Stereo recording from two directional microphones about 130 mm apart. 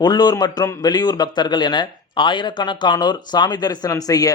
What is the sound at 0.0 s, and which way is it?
A man's voice, 30° left (ahead or behind).